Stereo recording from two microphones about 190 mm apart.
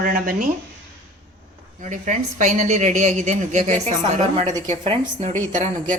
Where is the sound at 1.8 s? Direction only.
40° right (ahead or behind).